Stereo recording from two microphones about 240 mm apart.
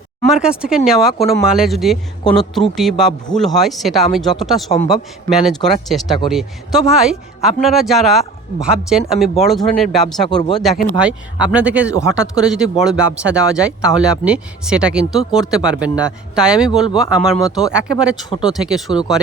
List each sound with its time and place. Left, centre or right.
0.2 s speech: centre
18.9 s speech: centre